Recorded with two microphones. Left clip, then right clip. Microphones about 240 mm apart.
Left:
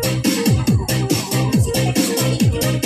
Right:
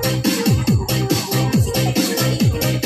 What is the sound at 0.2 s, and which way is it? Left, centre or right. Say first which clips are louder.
Music: left 1 dB; left.